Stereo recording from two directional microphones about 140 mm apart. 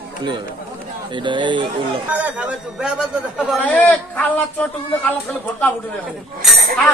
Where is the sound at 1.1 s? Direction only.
35° right (ahead or behind).